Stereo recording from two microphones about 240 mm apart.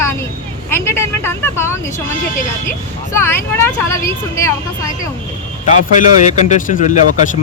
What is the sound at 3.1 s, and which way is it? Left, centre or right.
Speech, centre.